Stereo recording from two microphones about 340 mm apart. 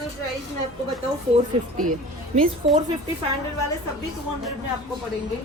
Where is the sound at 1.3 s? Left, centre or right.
Right.